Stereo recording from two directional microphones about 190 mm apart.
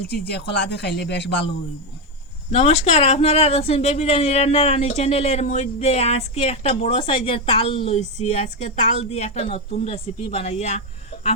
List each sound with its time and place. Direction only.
0.1 s speech: 60° left (ahead or behind)
2.5 s speech: 30° left (ahead or behind)